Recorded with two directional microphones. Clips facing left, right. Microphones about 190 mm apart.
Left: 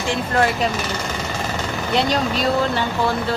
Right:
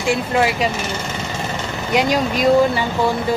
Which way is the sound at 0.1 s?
10° right (ahead or behind).